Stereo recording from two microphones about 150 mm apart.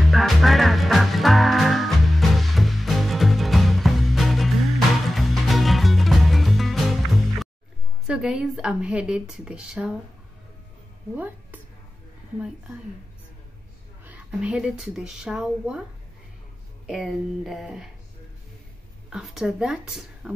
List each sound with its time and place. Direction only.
0.0 s music: centre (ahead or behind)
8.1 s speech: 5° right (ahead or behind)
11.1 s a sound: 10° right (ahead or behind)
14.0 s speech: 10° right (ahead or behind)
16.8 s speech: centre (ahead or behind)
19.0 s speech: 5° right (ahead or behind)